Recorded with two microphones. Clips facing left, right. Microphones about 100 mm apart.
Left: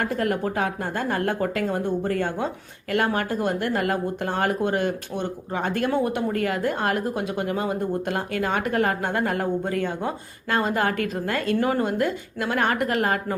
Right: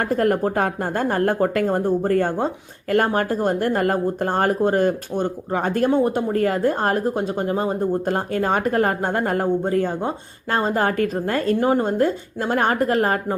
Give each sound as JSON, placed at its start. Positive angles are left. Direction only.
{"t": 0.0, "sound": "speech", "side_deg": -40}